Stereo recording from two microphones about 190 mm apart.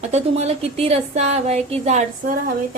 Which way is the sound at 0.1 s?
35° right (ahead or behind).